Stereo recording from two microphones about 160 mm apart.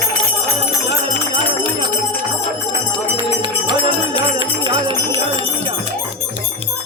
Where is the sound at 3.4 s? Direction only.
30° right (ahead or behind).